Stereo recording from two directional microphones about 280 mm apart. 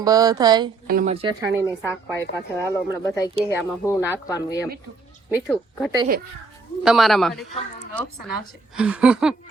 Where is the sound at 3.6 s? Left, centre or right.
Centre.